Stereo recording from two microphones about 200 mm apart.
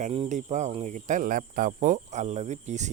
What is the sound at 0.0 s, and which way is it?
Speech, 35° right (ahead or behind).